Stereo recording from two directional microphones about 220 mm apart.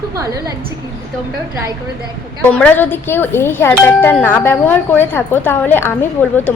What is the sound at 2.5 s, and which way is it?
Speech, 5° left (ahead or behind).